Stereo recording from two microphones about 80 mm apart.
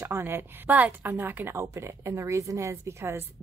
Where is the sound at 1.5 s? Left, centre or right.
Right.